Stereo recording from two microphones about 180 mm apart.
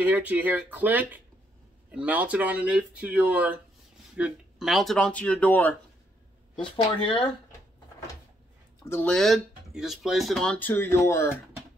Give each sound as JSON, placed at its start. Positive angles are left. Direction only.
{"t": 0.0, "sound": "speech", "side_deg": -10}
{"t": 6.5, "sound": "speech", "side_deg": 30}
{"t": 8.8, "sound": "speech", "side_deg": 10}